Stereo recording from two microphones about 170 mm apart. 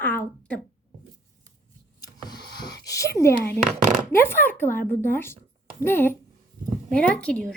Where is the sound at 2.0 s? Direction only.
25° left (ahead or behind).